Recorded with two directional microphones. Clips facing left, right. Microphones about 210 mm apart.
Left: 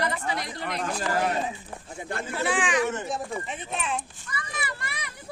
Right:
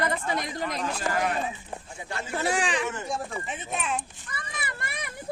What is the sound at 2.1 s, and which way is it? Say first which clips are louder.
Speech: left 3 dB; 50° left (ahead or behind).